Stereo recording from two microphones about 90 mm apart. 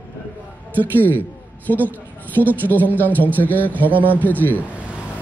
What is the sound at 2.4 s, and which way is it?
Speech, 20° right (ahead or behind).